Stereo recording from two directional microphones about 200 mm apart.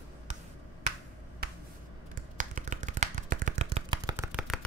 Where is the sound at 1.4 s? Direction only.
50° right (ahead or behind).